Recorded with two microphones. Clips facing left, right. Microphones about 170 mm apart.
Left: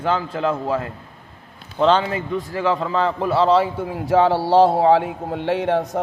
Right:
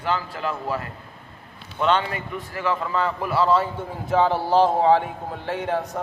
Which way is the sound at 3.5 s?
80° left.